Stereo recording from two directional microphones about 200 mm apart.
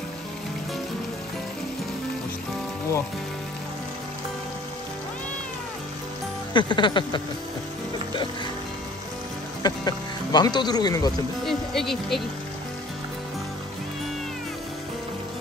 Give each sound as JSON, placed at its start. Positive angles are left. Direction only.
{"t": 6.5, "sound": "music", "side_deg": 25}
{"t": 9.6, "sound": "speech", "side_deg": 20}
{"t": 11.4, "sound": "speech", "side_deg": 0}